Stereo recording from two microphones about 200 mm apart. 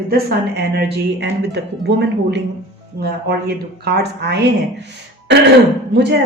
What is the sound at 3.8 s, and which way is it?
Speech, 55° right (ahead or behind).